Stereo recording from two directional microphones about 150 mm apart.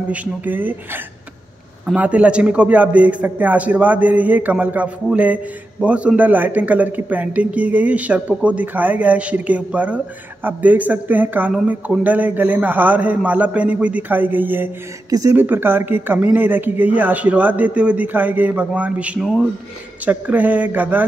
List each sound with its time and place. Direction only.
0.1 s a man's voice: 10° right (ahead or behind)
15.0 s speech: 25° right (ahead or behind)
15.3 s a man's voice: 10° right (ahead or behind)